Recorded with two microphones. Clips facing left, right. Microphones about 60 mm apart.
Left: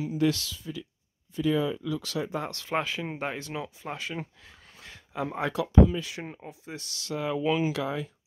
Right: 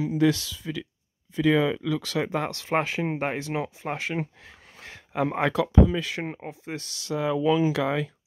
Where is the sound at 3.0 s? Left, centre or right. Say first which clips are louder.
Right 5 dB; right.